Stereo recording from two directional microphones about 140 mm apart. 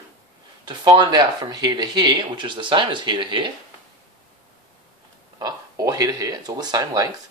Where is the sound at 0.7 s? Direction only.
30° right (ahead or behind).